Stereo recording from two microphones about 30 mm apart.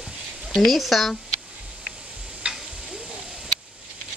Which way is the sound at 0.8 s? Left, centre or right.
Centre.